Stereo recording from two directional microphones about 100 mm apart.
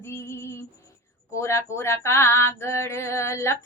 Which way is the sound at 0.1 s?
25° left (ahead or behind).